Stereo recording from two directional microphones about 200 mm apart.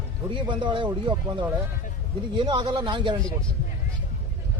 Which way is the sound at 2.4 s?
25° right (ahead or behind).